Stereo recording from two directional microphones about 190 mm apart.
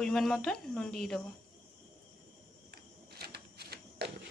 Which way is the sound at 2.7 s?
55° right (ahead or behind).